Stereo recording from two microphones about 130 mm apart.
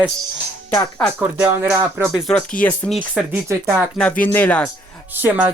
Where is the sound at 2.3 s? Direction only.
10° left (ahead or behind).